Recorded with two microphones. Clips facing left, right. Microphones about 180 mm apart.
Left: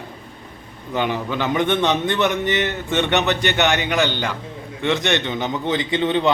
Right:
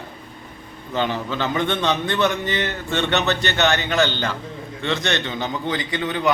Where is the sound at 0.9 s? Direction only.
15° left (ahead or behind).